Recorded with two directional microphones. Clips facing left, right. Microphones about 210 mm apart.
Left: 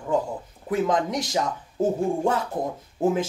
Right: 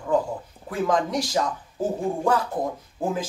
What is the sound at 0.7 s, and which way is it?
Speech, 20° left (ahead or behind).